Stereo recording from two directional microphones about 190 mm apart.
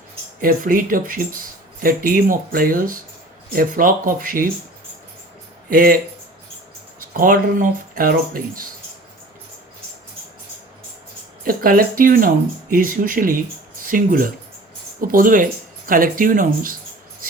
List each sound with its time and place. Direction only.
0.4 s speech: 45° right (ahead or behind)
5.7 s speech: 50° right (ahead or behind)
7.1 s speech: 45° right (ahead or behind)
11.4 s speech: 50° right (ahead or behind)